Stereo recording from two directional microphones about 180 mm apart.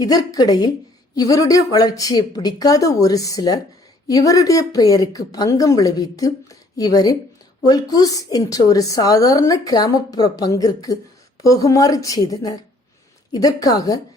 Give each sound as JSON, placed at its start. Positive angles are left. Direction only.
{"t": 0.0, "sound": "a woman's voice", "side_deg": 20}